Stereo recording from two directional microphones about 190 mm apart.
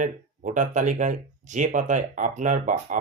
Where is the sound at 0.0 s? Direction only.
40° right (ahead or behind).